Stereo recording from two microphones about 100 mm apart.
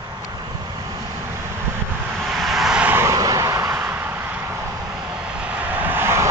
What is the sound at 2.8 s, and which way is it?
Vehicle, 20° right (ahead or behind).